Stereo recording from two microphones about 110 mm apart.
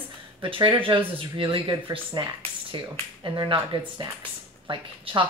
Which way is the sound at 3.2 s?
45° right (ahead or behind).